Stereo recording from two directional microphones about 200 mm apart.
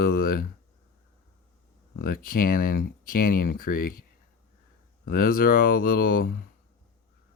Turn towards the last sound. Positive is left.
turn(degrees=45)  # may be behind; listen again after turning